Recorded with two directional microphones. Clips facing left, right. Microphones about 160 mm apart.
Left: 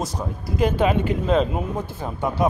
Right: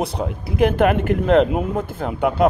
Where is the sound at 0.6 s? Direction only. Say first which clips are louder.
Right 4 dB; 60° right (ahead or behind).